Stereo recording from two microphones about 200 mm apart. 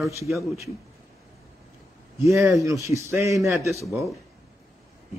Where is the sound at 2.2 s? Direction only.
15° right (ahead or behind).